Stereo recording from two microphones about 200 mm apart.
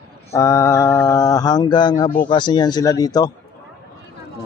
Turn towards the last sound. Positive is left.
turn(degrees=20)  # may be behind; listen again after turning